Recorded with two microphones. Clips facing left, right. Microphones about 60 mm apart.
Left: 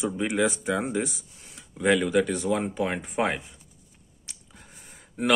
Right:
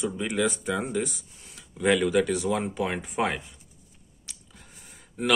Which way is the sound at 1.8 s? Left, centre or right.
Centre.